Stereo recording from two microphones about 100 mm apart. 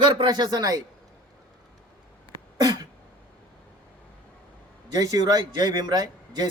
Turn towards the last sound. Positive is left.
turn(degrees=-45)  # may be behind; listen again after turning